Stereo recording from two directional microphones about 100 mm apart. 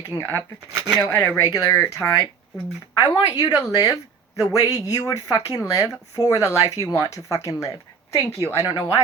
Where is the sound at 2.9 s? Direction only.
45° left (ahead or behind); by 7.7 s 30° left (ahead or behind).